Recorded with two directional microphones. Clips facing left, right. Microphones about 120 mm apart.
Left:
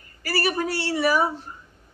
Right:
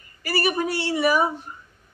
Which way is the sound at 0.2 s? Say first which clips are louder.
Right 1 dB; 20° right (ahead or behind).